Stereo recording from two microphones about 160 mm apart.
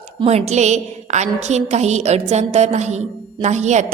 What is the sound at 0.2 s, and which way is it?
A woman's voice, 40° right (ahead or behind).